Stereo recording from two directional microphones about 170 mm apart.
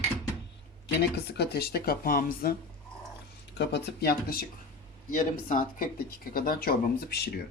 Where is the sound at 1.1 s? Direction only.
75° left (ahead or behind).